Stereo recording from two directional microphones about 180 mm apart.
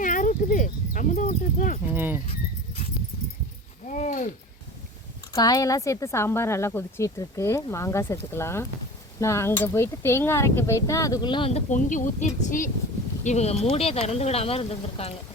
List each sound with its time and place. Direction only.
0.0 s a sound: 45° left (ahead or behind)
1.8 s speech: 10° right (ahead or behind)
3.8 s speech: 45° left (ahead or behind)
5.3 s speech: 20° left (ahead or behind)